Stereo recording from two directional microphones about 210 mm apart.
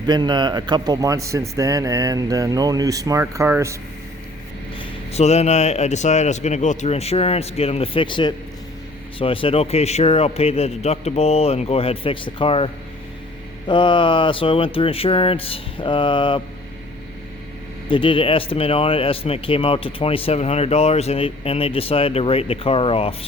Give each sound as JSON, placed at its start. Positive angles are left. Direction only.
{"t": 0.1, "sound": "a man's voice", "side_deg": -20}
{"t": 5.1, "sound": "speech", "side_deg": 30}
{"t": 17.8, "sound": "speech", "side_deg": 25}